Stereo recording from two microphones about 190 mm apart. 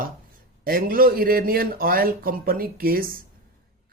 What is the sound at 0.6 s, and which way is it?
Speech, 50° right (ahead or behind).